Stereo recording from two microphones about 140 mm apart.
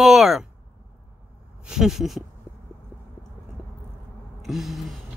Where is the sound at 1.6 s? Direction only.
5° right (ahead or behind).